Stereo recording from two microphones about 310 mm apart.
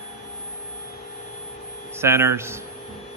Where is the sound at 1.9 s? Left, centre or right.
Centre.